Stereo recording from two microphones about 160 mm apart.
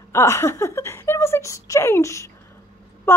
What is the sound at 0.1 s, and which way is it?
A woman's voice, 15° left (ahead or behind).